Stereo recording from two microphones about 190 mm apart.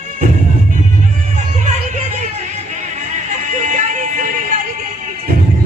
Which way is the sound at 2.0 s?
40° right (ahead or behind).